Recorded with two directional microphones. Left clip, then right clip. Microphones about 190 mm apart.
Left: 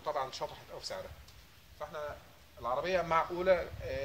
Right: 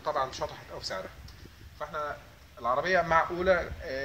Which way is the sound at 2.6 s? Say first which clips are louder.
Right 6 dB; 25° left (ahead or behind).